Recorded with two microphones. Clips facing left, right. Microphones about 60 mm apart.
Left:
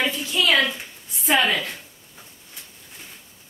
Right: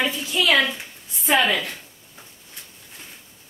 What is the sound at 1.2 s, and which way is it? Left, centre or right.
Speech, centre.